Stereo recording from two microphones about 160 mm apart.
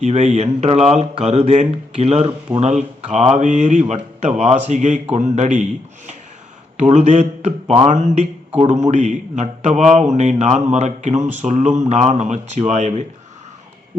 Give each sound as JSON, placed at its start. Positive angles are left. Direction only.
{"t": 0.0, "sound": "a man's voice", "side_deg": -50}
{"t": 6.7, "sound": "a man's voice", "side_deg": -45}